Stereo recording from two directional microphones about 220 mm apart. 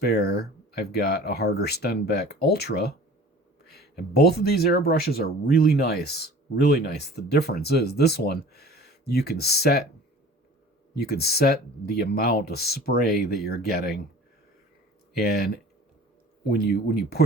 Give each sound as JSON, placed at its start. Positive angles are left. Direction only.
{"t": 0.0, "sound": "speech", "side_deg": 45}
{"t": 10.9, "sound": "speech", "side_deg": 45}
{"t": 16.5, "sound": "speech", "side_deg": 45}